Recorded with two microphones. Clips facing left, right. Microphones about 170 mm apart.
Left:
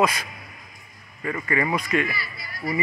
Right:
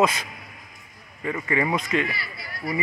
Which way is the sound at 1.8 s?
20° right (ahead or behind).